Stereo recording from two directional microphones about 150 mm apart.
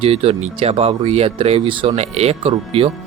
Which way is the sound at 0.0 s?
40° right (ahead or behind).